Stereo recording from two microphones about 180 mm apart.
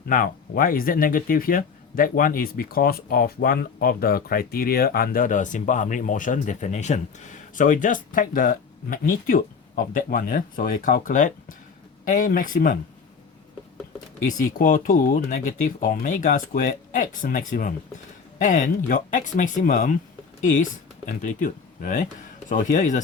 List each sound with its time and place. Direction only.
0.1 s speech: 50° left (ahead or behind)
14.3 s speech: 45° left (ahead or behind)